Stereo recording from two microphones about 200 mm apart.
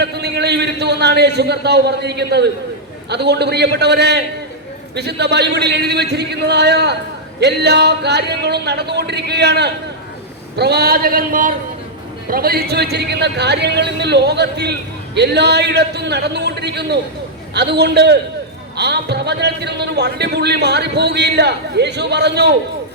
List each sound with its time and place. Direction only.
0.0 s a man's voice: 55° right (ahead or behind)